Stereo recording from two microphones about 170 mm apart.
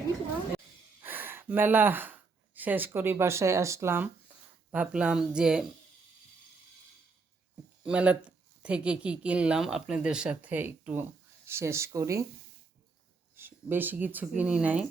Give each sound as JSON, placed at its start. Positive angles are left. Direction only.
{"t": 1.0, "sound": "speech", "side_deg": -10}
{"t": 7.9, "sound": "speech", "side_deg": -5}
{"t": 13.3, "sound": "speech", "side_deg": -15}